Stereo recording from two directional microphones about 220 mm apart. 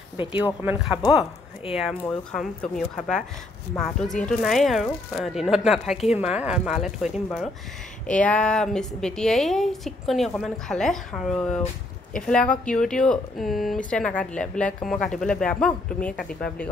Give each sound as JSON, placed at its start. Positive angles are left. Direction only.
{"t": 0.2, "sound": "speech", "side_deg": 20}
{"t": 0.6, "sound": "speech", "side_deg": -10}